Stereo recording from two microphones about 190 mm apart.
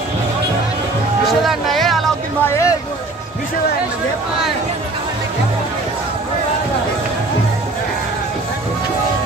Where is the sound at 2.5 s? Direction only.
15° left (ahead or behind).